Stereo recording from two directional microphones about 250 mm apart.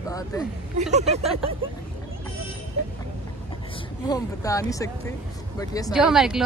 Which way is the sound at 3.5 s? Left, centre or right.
Centre.